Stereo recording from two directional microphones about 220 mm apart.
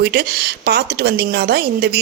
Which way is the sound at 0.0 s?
45° right (ahead or behind).